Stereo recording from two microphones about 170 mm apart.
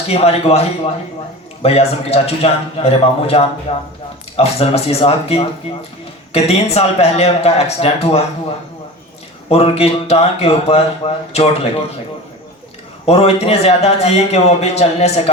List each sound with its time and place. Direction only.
0.1 s a man's voice: 35° left (ahead or behind)
1.6 s a man's voice: 35° left (ahead or behind)
9.5 s a man's voice: 35° left (ahead or behind)
13.1 s a man's voice: 40° left (ahead or behind)